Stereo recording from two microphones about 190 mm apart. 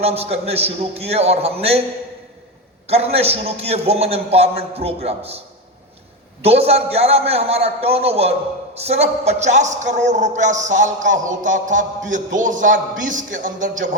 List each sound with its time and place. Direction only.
0.0 s a man's voice: 35° right (ahead or behind)
2.8 s a man's voice: 30° right (ahead or behind)
6.4 s a man's voice: 30° right (ahead or behind)